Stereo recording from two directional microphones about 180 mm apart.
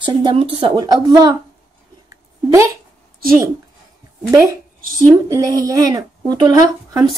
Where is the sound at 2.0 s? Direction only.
15° right (ahead or behind).